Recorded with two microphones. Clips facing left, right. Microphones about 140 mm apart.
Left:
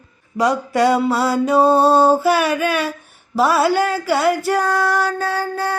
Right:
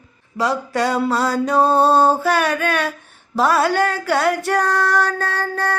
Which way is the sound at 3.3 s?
5° left (ahead or behind).